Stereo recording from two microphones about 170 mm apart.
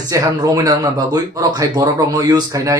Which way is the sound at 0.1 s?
20° right (ahead or behind).